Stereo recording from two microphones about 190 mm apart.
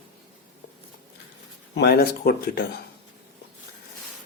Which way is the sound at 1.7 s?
55° left (ahead or behind).